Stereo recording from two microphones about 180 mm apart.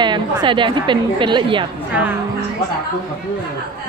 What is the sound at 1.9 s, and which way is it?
Speech, 10° right (ahead or behind).